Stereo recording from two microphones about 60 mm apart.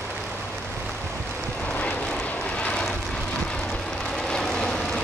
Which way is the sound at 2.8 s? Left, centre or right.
Centre.